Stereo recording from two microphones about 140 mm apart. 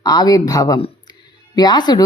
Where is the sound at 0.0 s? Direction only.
25° left (ahead or behind).